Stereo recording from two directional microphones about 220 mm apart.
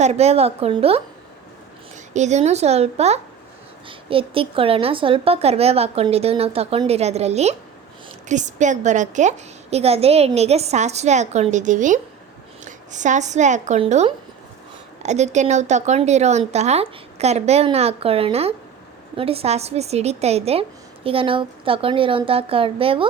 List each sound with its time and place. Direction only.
0.0 s a woman's voice: 30° right (ahead or behind)
2.1 s a woman's voice: 30° right (ahead or behind)